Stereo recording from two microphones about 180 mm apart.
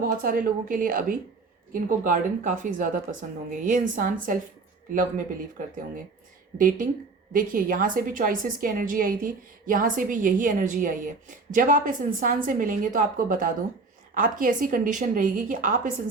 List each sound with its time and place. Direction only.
0.2 s a woman's voice: 50° right (ahead or behind)